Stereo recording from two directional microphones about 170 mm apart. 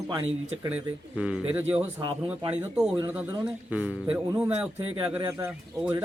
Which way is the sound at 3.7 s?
5° right (ahead or behind).